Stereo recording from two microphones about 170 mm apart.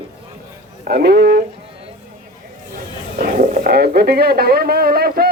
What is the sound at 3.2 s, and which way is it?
Speech, 60° right (ahead or behind).